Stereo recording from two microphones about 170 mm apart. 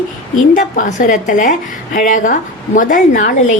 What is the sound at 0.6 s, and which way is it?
A woman's voice, 50° left (ahead or behind).